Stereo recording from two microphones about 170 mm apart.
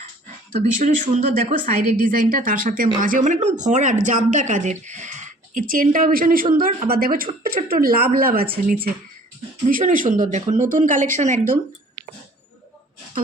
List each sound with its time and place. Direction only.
0.8 s a woman's voice: 50° right (ahead or behind)
9.6 s a woman's voice: 55° right (ahead or behind)